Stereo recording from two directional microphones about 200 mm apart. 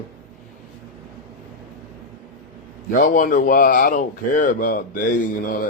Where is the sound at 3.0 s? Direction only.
45° left (ahead or behind).